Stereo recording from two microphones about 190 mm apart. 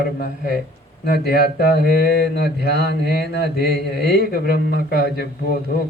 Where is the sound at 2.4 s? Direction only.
55° right (ahead or behind).